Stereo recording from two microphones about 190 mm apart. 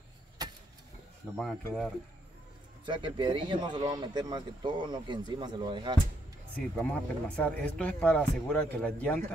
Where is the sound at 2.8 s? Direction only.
25° right (ahead or behind).